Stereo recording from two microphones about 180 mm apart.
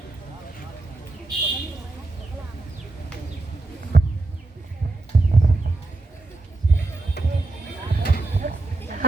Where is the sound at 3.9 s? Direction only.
55° right (ahead or behind).